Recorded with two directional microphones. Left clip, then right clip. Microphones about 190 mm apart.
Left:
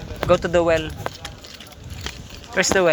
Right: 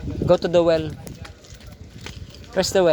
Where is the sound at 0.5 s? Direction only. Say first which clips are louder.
Right 1 dB; 55° right (ahead or behind).